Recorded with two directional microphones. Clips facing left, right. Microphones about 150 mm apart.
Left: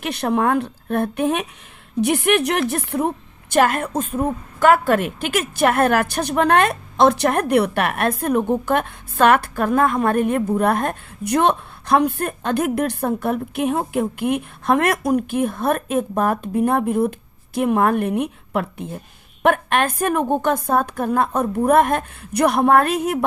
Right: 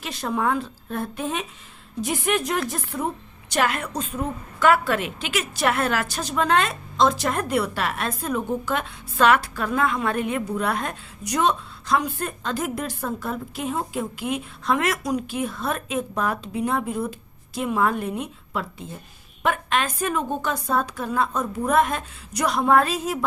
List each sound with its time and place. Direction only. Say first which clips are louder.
0.0 s a woman's voice: left 6 dB; 65° left (ahead or behind)
3.5 s a woman's voice: left 6 dB; 45° left (ahead or behind)